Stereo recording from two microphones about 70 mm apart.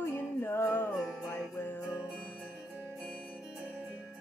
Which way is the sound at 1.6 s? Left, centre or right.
Left.